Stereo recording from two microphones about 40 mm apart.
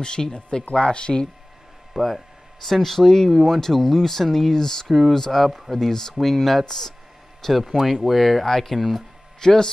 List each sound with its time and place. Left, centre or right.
0.0 s speech: left
2.0 s speech: centre
2.6 s speech: centre
4.8 s speech: centre
5.1 s speech: centre
7.4 s speech: centre
9.4 s speech: centre